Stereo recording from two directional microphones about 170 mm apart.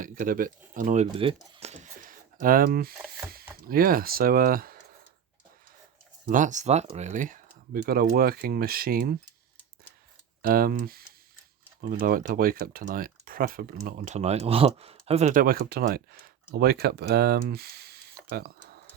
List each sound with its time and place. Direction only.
0.0 s speech: 50° right (ahead or behind)
1.1 s a sound: 30° right (ahead or behind); by 2.9 s 60° right (ahead or behind)
3.3 s speech: 60° right (ahead or behind)
6.2 s speech: 50° right (ahead or behind)
10.4 s speech: 60° right (ahead or behind)